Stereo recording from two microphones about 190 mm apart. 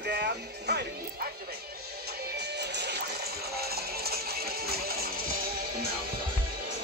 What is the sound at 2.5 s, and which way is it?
Music, 65° right (ahead or behind).